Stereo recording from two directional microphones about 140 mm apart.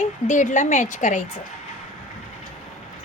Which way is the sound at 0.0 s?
60° left (ahead or behind).